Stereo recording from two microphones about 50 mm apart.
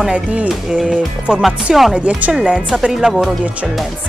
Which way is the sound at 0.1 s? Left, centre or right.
Right.